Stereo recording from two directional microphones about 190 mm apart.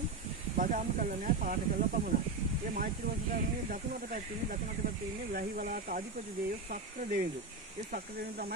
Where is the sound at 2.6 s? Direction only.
45° right (ahead or behind).